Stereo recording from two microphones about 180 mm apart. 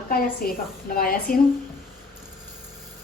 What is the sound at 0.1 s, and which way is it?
Speech, 55° left (ahead or behind).